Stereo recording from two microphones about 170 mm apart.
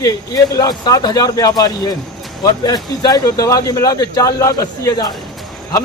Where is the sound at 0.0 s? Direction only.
20° left (ahead or behind).